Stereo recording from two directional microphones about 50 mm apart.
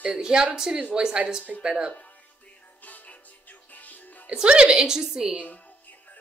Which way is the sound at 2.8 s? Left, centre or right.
Left.